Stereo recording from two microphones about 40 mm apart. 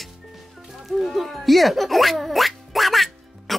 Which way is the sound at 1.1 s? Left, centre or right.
Centre.